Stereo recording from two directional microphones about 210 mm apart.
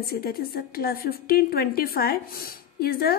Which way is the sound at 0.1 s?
45° left (ahead or behind).